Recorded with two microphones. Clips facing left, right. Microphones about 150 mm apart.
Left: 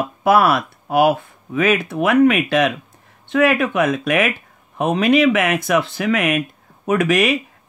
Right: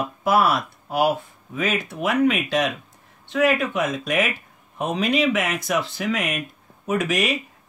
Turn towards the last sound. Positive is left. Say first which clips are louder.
# left 6 dB
turn(degrees=65)  # may be behind; listen again after turning